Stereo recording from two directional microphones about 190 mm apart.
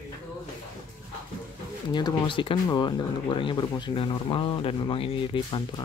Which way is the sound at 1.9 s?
20° left (ahead or behind).